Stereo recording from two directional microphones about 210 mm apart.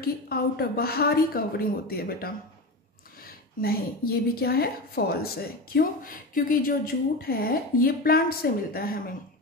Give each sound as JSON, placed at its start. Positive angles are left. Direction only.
{"t": 0.0, "sound": "a woman's voice", "side_deg": 45}